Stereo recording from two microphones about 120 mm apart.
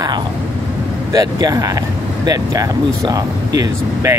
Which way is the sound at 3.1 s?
30° right (ahead or behind).